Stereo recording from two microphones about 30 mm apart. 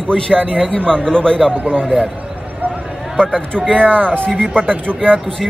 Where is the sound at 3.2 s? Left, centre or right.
Left.